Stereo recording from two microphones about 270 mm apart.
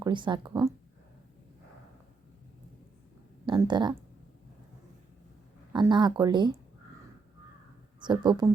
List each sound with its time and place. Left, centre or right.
0.0 s speech: centre
3.4 s speech: centre
5.7 s speech: centre
8.0 s speech: centre